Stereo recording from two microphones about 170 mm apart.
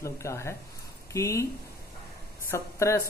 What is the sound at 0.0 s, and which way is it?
Speech, 15° left (ahead or behind).